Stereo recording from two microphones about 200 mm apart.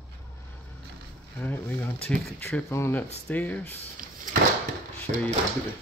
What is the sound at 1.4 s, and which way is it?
Speech, 10° left (ahead or behind).